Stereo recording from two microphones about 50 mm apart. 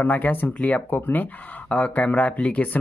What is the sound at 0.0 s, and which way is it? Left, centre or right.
Speech, left.